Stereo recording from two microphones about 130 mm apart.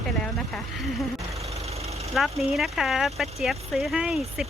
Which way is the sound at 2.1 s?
Centre (ahead or behind).